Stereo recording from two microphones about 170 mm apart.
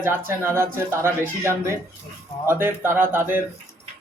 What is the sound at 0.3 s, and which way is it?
A man's voice, 15° right (ahead or behind).